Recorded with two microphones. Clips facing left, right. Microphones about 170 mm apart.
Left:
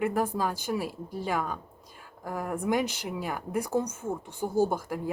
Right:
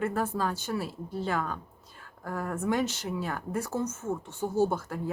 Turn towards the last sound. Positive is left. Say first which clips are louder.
# left 1 dB
turn(degrees=10)  # may be behind; listen again after turning